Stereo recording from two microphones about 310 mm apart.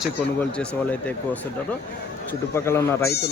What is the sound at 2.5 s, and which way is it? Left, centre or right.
Speech, centre.